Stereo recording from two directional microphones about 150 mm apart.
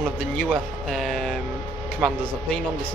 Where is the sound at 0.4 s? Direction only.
5° left (ahead or behind).